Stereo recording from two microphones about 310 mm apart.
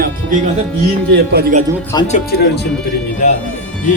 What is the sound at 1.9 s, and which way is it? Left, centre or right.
Speech, centre.